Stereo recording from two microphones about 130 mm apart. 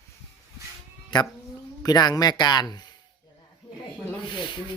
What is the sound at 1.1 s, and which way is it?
Speech, 35° left (ahead or behind).